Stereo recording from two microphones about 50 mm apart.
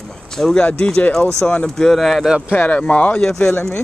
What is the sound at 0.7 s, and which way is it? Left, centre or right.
Speech, centre.